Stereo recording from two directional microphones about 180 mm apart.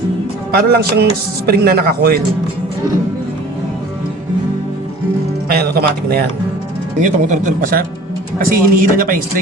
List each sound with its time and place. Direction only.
0.5 s speech: 60° right (ahead or behind)
5.5 s speech: 60° right (ahead or behind)
7.0 s speech: 45° right (ahead or behind)